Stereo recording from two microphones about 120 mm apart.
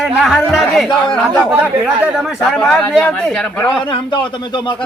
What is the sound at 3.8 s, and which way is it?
Speech, 40° left (ahead or behind).